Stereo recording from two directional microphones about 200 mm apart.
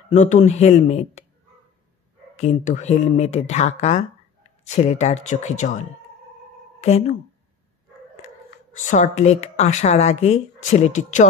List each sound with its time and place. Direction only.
0.1 s a woman's voice: 35° left (ahead or behind)
2.3 s a woman's voice: 35° left (ahead or behind)
6.8 s a woman's voice: 30° left (ahead or behind)
8.7 s a woman's voice: 40° left (ahead or behind)